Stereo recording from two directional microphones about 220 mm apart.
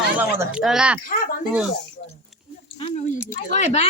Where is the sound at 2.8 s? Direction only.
30° left (ahead or behind).